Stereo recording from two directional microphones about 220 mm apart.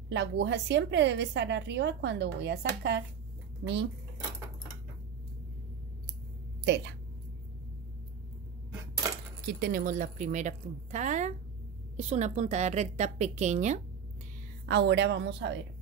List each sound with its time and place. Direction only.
0.1 s a woman's voice: 55° right (ahead or behind)
6.6 s a woman's voice: 55° right (ahead or behind)
9.5 s a woman's voice: 45° right (ahead or behind)
14.7 s a woman's voice: 50° right (ahead or behind)